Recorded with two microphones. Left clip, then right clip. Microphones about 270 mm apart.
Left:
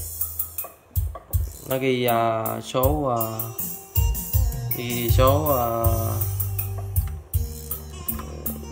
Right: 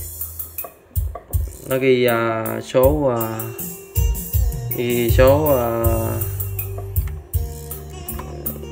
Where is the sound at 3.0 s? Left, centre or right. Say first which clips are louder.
Right 4 dB; left.